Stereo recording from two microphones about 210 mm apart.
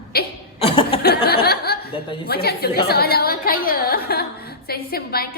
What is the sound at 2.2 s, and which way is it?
A woman's voice, 50° left (ahead or behind).